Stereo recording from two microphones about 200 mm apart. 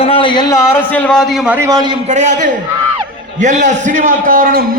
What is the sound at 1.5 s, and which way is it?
Speech, 15° right (ahead or behind).